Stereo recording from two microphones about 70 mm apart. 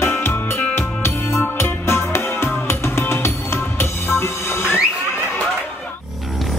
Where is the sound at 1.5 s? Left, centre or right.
Left.